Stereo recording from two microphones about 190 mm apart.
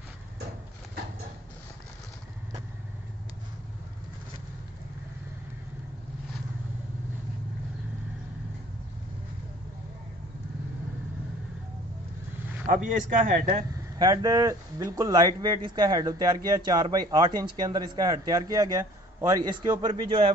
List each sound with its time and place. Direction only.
12.6 s a man's voice: 45° right (ahead or behind)
13.9 s speech: 20° right (ahead or behind)